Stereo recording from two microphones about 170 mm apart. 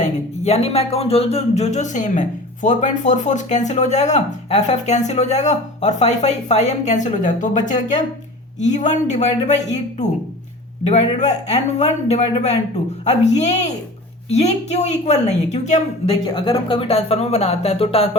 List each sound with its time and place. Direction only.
0.0 s speech: 40° left (ahead or behind)
16.2 s speech: 30° left (ahead or behind)